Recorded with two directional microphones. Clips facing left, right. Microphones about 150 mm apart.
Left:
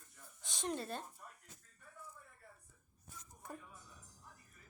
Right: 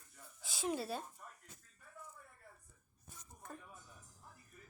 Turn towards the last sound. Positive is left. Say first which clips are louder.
# left 2 dB
turn(degrees=10)  # may be behind; listen again after turning